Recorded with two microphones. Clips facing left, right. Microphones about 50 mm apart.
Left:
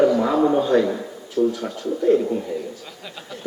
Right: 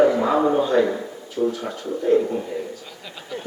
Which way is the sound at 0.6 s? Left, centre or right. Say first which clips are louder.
Even; centre.